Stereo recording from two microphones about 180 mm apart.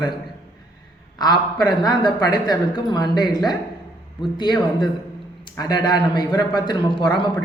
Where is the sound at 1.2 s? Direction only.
25° left (ahead or behind).